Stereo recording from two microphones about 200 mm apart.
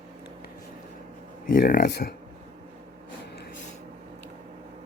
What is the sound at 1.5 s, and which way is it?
Speech, 45° left (ahead or behind).